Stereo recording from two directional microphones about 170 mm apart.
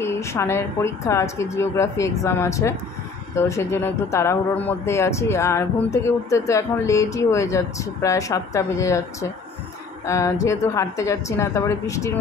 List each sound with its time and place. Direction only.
0.0 s speech: 15° left (ahead or behind)